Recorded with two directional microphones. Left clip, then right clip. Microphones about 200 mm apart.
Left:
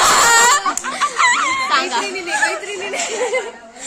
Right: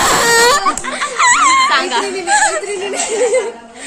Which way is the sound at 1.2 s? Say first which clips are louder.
Right 6 dB; 35° right (ahead or behind).